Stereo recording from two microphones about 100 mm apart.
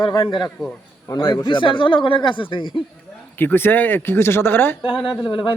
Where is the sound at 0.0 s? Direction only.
55° left (ahead or behind).